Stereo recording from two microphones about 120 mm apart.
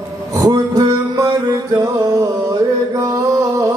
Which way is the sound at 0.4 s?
30° right (ahead or behind).